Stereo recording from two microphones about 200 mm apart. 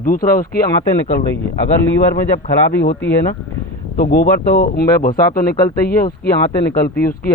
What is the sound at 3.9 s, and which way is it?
Speech, 50° left (ahead or behind).